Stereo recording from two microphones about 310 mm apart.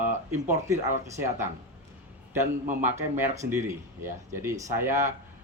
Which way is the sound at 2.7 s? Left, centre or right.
Right.